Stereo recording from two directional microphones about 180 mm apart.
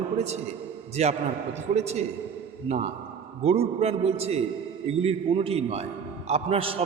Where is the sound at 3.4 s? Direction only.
35° right (ahead or behind).